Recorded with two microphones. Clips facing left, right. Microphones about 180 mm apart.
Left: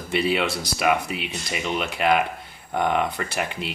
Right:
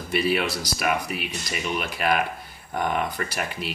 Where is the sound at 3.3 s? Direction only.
20° left (ahead or behind).